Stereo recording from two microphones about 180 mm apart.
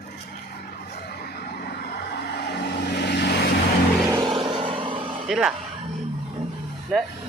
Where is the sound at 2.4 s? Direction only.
65° left (ahead or behind).